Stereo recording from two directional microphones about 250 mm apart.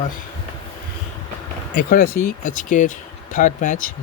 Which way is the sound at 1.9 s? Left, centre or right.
Left.